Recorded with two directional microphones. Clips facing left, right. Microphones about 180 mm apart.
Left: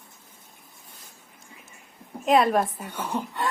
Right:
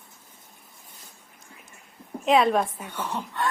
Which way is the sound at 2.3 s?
Centre (ahead or behind).